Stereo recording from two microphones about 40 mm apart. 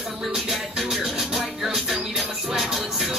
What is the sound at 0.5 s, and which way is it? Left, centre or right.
Music, centre.